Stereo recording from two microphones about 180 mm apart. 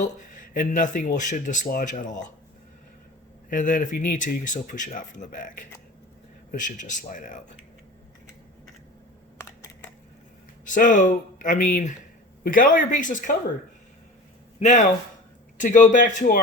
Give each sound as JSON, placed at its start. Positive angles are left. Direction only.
{"t": 0.0, "sound": "speech", "side_deg": 45}
{"t": 3.5, "sound": "speech", "side_deg": 45}
{"t": 10.7, "sound": "speech", "side_deg": 45}
{"t": 14.6, "sound": "speech", "side_deg": 45}